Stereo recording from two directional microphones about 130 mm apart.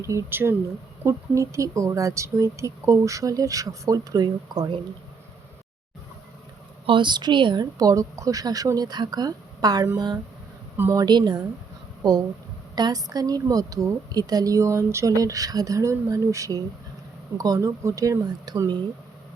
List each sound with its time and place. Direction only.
0.0 s a woman's voice: 20° right (ahead or behind)
6.8 s speech: 40° right (ahead or behind)
10.8 s a woman's voice: 20° right (ahead or behind)
11.0 s a woman's voice: 35° right (ahead or behind)